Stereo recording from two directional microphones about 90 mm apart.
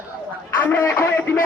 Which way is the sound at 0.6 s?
25° left (ahead or behind).